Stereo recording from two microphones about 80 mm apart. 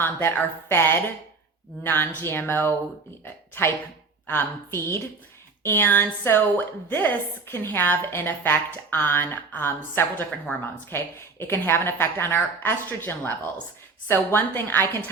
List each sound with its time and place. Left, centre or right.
0.0 s a woman's voice: left
4.3 s a woman's voice: left